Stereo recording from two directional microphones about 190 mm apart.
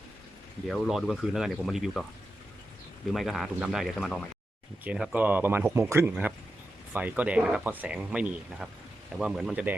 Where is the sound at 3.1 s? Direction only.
Centre (ahead or behind).